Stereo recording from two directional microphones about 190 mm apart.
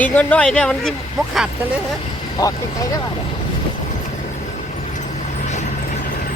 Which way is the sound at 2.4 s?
20° left (ahead or behind).